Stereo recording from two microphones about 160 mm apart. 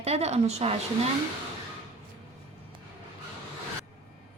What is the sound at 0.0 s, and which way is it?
Speech, 40° right (ahead or behind).